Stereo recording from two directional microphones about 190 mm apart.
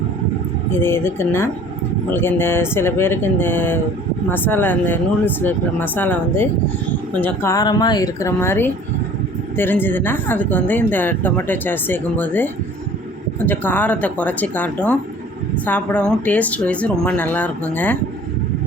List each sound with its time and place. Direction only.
0.8 s speech: 10° left (ahead or behind)